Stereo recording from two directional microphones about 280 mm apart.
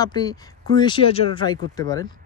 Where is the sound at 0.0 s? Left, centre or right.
Centre.